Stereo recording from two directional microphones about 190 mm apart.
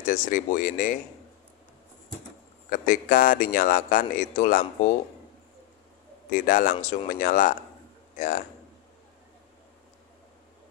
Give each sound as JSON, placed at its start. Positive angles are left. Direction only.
{"t": 0.0, "sound": "a man's voice", "side_deg": 40}
{"t": 2.7, "sound": "a man's voice", "side_deg": 45}
{"t": 6.3, "sound": "a man's voice", "side_deg": 45}